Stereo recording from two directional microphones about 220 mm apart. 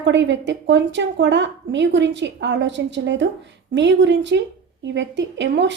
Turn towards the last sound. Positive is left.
turn(degrees=-55)  # may be behind; listen again after turning